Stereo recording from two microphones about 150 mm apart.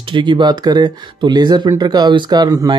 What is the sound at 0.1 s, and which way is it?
Speech, 30° right (ahead or behind).